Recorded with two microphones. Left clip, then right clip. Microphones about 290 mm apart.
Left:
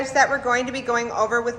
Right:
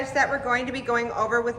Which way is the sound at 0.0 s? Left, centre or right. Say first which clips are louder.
Left 4 dB; centre.